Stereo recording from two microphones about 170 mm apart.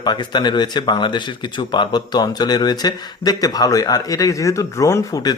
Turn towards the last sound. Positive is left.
turn(degrees=20)  # may be behind; listen again after turning